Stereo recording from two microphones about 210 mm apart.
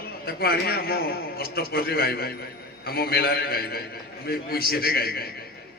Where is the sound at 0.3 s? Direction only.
45° left (ahead or behind).